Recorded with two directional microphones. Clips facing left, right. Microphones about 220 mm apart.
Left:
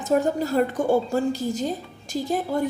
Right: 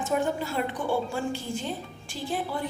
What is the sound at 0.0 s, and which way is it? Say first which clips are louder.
A woman's voice: left 5 dB; 40° left (ahead or behind).